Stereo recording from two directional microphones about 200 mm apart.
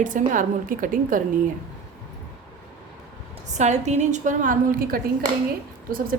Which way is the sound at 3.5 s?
35° right (ahead or behind).